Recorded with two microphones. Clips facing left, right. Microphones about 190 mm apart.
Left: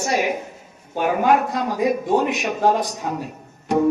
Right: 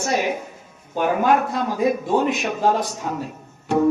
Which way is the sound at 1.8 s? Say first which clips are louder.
Left 1 dB; 15° left (ahead or behind).